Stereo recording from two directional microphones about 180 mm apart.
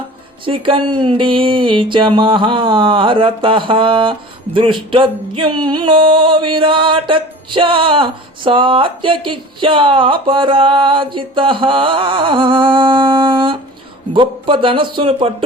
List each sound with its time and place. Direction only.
0.4 s music: 30° right (ahead or behind)